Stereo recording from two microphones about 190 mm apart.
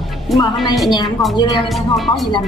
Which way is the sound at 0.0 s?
Centre (ahead or behind).